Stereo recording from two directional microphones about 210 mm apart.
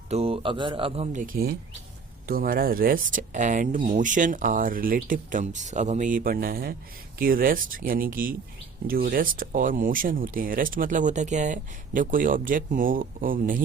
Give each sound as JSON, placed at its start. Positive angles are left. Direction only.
{"t": 0.1, "sound": "speech", "side_deg": -30}